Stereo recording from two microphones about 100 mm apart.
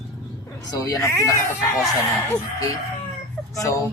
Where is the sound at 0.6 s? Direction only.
35° left (ahead or behind).